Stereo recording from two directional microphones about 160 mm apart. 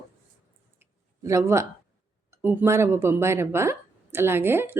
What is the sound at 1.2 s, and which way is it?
Speech, 20° right (ahead or behind).